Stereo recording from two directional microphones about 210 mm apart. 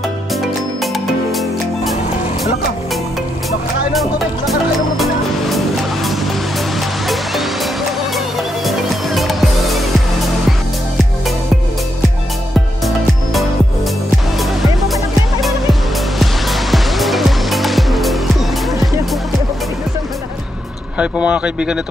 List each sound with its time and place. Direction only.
3.9 s music: centre (ahead or behind)
8.6 s music: centre (ahead or behind)
12.8 s music: centre (ahead or behind)
16.2 s music: centre (ahead or behind)
21.0 s speech: 5° right (ahead or behind)